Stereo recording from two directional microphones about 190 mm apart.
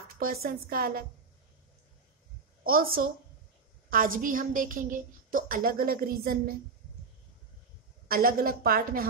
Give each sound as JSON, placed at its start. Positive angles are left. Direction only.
{"t": 0.2, "sound": "a woman's voice", "side_deg": -50}
{"t": 2.6, "sound": "a woman's voice", "side_deg": -50}
{"t": 8.1, "sound": "a woman's voice", "side_deg": -50}